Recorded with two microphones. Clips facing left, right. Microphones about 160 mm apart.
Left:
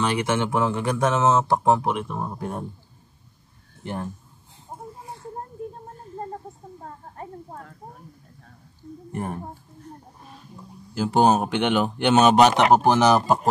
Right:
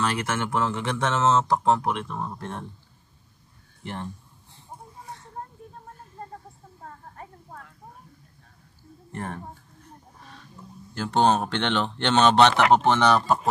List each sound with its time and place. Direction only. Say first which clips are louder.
0.0 s speech: left 4 dB; 5° left (ahead or behind)
3.8 s speech: left 4 dB; centre (ahead or behind)
4.6 s a sound: left 4 dB; 20° left (ahead or behind)
5.4 s a sound: left 6 dB; 35° left (ahead or behind)
9.1 s speech: left 4 dB; 10° left (ahead or behind)
10.2 s music: left 2 dB; 10° left (ahead or behind)
11.0 s speech: left 3 dB; 10° left (ahead or behind)